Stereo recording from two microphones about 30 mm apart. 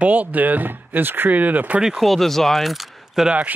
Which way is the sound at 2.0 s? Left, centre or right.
Centre.